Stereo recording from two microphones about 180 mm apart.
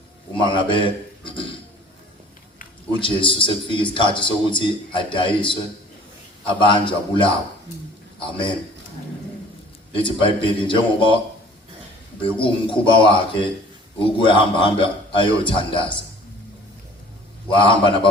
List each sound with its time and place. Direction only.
0.3 s a man's voice: 25° left (ahead or behind)
3.0 s a man's voice: 30° left (ahead or behind)
6.6 s a man's voice: 25° left (ahead or behind)
10.0 s a man's voice: 30° left (ahead or behind)
12.2 s a man's voice: 30° left (ahead or behind)
17.5 s a man's voice: 30° left (ahead or behind)